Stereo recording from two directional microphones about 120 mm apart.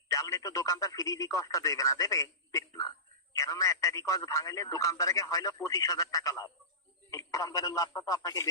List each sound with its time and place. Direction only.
0.1 s speech: 25° left (ahead or behind)